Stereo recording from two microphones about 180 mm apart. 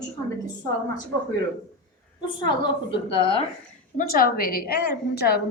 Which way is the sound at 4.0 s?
55° left (ahead or behind).